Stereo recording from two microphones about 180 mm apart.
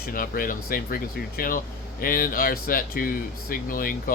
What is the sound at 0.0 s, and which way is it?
Speech, 50° left (ahead or behind).